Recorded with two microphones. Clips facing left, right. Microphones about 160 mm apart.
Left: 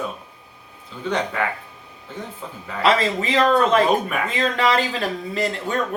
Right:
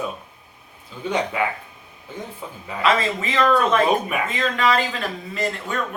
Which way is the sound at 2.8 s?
35° left (ahead or behind).